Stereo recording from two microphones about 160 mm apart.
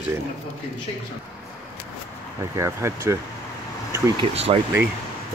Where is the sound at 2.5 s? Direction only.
15° right (ahead or behind).